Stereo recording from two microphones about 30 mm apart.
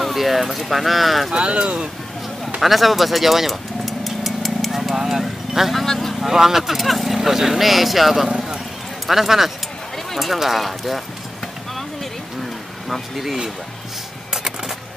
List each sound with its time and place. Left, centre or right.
0.0 s speech: centre
1.3 s speech: right
2.6 s vehicle: centre
4.9 s a sound: centre
5.9 s speech: centre
6.2 s speech: centre
6.8 s speech: centre
7.2 s speech: centre
12.8 s speech: centre